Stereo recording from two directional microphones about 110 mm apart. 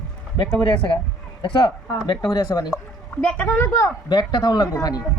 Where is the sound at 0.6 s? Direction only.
50° left (ahead or behind).